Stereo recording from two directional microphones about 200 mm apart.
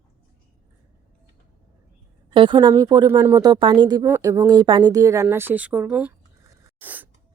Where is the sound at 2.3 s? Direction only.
25° right (ahead or behind); by 7.1 s 10° right (ahead or behind).